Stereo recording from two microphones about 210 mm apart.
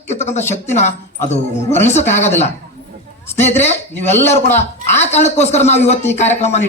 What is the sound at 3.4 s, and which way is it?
Speech, 30° left (ahead or behind).